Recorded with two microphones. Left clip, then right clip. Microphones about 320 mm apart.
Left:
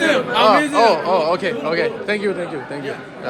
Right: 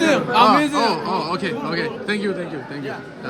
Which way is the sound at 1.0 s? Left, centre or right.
Centre.